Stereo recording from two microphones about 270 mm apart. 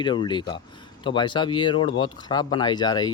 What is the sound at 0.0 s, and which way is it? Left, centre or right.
Speech, centre.